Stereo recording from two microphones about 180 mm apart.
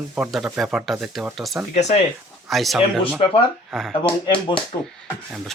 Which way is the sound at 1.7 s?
40° left (ahead or behind).